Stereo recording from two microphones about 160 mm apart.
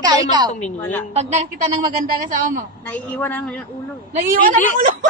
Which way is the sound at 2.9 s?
10° left (ahead or behind).